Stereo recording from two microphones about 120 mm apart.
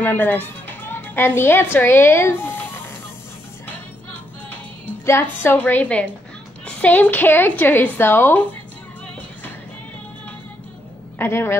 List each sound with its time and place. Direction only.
0.0 s a woman's voice: 15° left (ahead or behind)
5.0 s a woman's voice: 20° left (ahead or behind)
11.1 s a woman's voice: 20° left (ahead or behind)